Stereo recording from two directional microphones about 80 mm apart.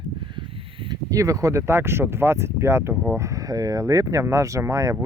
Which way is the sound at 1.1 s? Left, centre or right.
Right.